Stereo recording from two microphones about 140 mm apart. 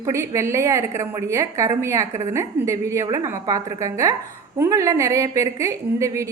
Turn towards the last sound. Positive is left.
turn(degrees=-20)  # may be behind; listen again after turning